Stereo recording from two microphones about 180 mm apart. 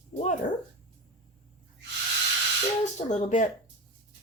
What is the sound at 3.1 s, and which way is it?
Speech, 45° left (ahead or behind).